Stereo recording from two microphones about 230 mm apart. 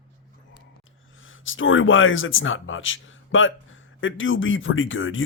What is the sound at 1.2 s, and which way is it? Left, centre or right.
Speech, left.